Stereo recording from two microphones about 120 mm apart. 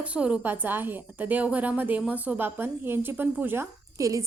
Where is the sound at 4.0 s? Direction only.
30° right (ahead or behind).